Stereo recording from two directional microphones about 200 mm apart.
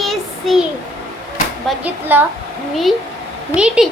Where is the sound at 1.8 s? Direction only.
10° right (ahead or behind).